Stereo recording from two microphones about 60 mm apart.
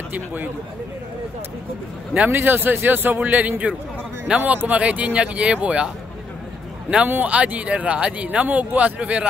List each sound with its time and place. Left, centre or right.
0.1 s a man's voice: right
2.3 s a man's voice: right
4.6 s speech: right
7.1 s speech: right